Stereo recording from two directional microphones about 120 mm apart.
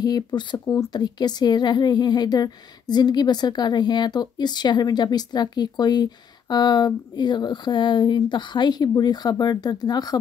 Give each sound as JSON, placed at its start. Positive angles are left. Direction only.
{"t": 0.0, "sound": "speech", "side_deg": 35}